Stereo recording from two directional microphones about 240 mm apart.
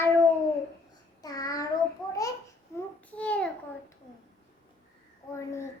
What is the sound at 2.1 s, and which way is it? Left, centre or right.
Babbling, centre.